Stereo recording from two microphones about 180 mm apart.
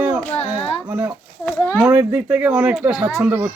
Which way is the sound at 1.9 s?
10° right (ahead or behind).